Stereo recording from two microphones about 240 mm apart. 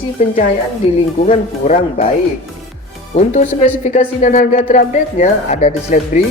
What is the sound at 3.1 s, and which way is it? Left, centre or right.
A woman's voice, left.